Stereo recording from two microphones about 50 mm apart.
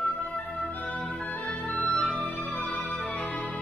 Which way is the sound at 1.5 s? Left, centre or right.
Left.